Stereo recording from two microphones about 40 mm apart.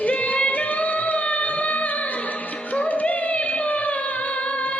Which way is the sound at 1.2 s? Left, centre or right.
Left.